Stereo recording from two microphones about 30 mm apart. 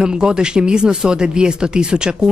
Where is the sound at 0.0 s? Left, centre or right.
Right.